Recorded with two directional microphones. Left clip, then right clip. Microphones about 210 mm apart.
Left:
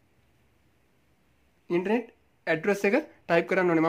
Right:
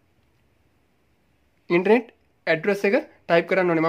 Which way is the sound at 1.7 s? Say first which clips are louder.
Right 8 dB; 20° right (ahead or behind).